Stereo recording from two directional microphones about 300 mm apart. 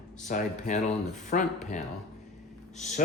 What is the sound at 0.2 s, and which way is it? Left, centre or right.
Speech, left.